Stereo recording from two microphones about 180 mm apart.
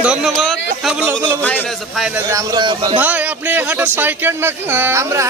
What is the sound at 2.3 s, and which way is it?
Speech, 20° right (ahead or behind).